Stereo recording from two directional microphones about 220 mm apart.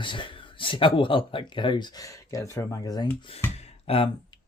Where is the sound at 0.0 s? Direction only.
20° left (ahead or behind).